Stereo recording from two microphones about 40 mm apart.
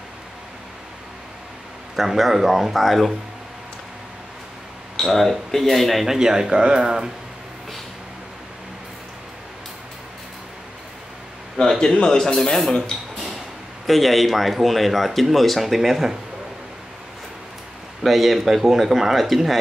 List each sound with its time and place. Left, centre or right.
2.0 s speech: centre
5.0 s speech: centre
6.0 s speech: centre
11.6 s speech: left
12.0 s speech: centre
13.8 s speech: centre
18.0 s speech: centre